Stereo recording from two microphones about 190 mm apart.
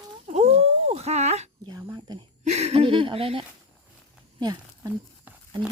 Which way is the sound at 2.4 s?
35° right (ahead or behind).